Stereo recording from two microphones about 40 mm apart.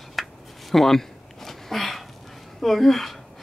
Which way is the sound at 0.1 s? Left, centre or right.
Centre.